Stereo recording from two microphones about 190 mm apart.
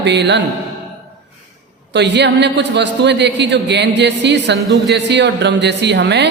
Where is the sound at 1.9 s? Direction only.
65° right (ahead or behind).